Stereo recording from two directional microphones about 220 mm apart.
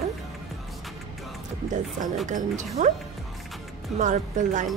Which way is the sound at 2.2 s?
35° right (ahead or behind).